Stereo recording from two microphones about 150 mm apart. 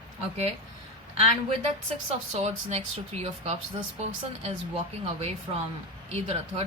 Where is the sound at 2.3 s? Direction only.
45° right (ahead or behind).